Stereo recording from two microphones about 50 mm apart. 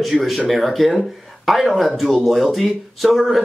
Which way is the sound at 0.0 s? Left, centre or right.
Centre.